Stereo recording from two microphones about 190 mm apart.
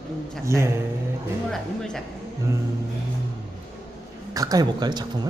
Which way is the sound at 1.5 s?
Centre (ahead or behind).